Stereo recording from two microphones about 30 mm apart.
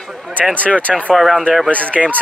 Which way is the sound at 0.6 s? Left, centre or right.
Left.